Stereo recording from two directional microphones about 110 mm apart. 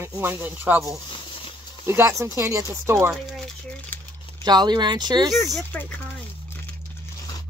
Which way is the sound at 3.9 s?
15° left (ahead or behind).